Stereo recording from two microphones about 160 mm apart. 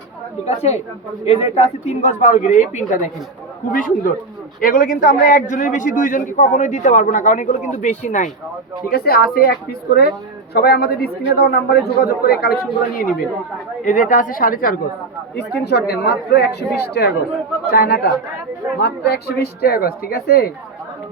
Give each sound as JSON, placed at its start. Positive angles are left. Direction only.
{"t": 0.4, "sound": "a woman's voice", "side_deg": 40}
{"t": 8.9, "sound": "speech", "side_deg": 75}
{"t": 13.8, "sound": "speech", "side_deg": 55}
{"t": 15.4, "sound": "speech", "side_deg": 90}
{"t": 17.7, "sound": "speech", "side_deg": 70}
{"t": 18.8, "sound": "speech", "side_deg": 90}